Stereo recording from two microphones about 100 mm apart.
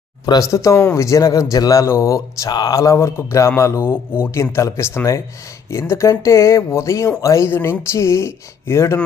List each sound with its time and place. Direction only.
0.3 s speech: 35° left (ahead or behind)
2.5 s speech: 40° left (ahead or behind); by 9.0 s 25° left (ahead or behind)